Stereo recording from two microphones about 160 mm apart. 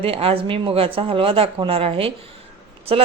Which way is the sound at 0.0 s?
35° right (ahead or behind).